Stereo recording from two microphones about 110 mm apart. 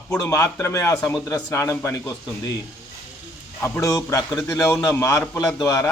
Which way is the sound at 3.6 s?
25° left (ahead or behind).